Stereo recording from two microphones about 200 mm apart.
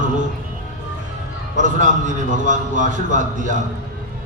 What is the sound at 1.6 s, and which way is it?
Music, 40° right (ahead or behind).